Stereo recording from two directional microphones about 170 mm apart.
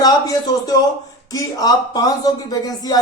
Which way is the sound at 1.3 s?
20° left (ahead or behind).